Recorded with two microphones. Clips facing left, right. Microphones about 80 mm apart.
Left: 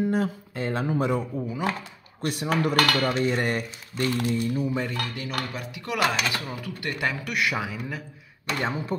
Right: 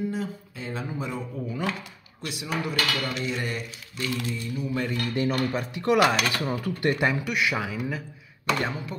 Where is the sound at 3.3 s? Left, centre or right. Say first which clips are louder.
Left 5 dB; left.